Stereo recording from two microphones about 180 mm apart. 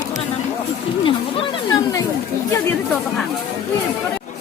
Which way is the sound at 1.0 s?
25° left (ahead or behind).